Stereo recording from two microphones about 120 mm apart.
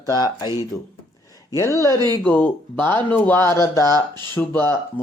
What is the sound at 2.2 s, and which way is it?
Speech, 15° left (ahead or behind).